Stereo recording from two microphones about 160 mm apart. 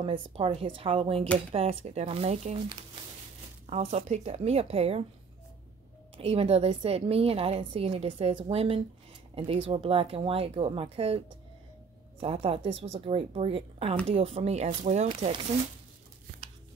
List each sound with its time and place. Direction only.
0.0 s a woman's voice: 35° right (ahead or behind)
3.7 s a woman's voice: 45° right (ahead or behind)
6.1 s a woman's voice: 40° right (ahead or behind)